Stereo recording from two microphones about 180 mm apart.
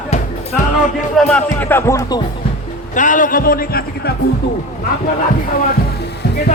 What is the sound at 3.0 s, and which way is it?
Speech, 45° left (ahead or behind).